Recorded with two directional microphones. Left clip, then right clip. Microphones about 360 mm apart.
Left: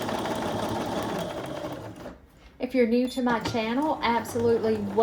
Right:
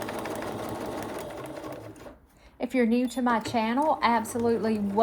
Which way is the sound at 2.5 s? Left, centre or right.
Right.